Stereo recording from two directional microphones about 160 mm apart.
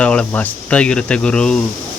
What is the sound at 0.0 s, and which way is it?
Speech, 5° left (ahead or behind).